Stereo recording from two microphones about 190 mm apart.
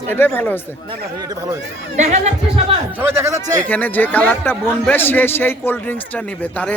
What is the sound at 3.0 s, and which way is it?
Speech, 10° right (ahead or behind).